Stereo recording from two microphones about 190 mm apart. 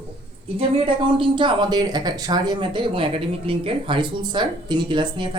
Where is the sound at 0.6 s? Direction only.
30° right (ahead or behind).